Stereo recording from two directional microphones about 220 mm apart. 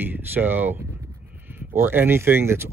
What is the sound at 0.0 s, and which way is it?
Speech, 10° right (ahead or behind).